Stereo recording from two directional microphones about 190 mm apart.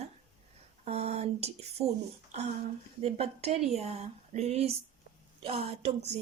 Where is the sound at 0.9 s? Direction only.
35° right (ahead or behind).